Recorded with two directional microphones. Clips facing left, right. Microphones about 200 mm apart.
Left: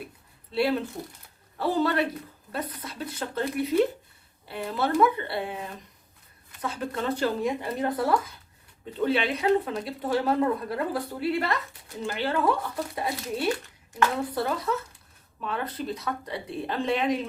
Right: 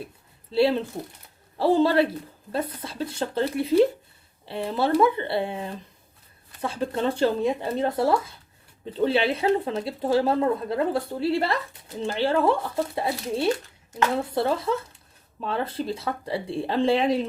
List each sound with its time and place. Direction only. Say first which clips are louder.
1.5 s speech: right 5 dB; 30° right (ahead or behind)